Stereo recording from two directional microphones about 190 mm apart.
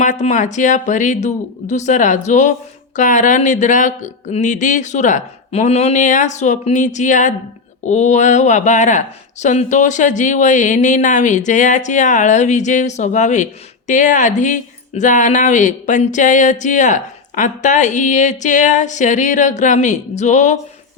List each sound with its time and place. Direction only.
0.0 s speech: 40° left (ahead or behind)